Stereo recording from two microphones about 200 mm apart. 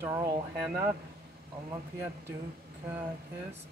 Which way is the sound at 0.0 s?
15° right (ahead or behind).